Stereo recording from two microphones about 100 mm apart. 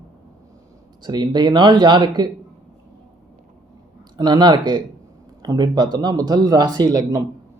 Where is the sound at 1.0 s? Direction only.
45° right (ahead or behind).